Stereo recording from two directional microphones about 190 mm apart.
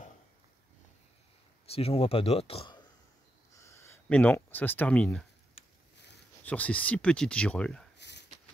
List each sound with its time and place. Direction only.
1.7 s speech: 30° left (ahead or behind)
3.5 s speech: 15° left (ahead or behind)
6.4 s speech: 10° left (ahead or behind)
8.0 s a sound: 65° left (ahead or behind)